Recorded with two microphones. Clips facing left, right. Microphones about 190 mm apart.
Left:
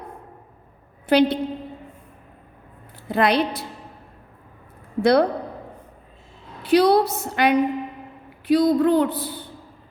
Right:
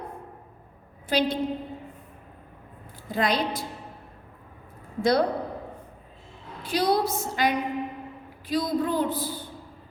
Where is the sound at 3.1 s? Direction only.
65° left (ahead or behind).